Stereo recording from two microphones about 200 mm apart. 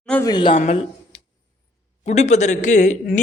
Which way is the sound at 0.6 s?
35° left (ahead or behind).